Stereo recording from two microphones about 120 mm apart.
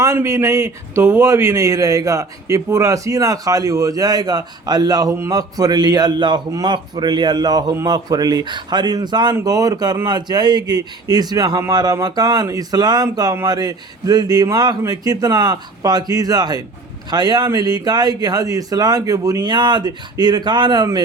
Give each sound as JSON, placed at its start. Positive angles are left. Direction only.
{"t": 0.0, "sound": "a man's voice", "side_deg": -25}